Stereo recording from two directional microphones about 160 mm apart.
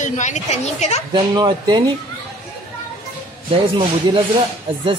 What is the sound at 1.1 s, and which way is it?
Speech, 30° right (ahead or behind).